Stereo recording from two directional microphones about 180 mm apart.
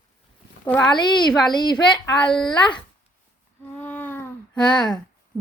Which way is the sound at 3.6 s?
10° left (ahead or behind).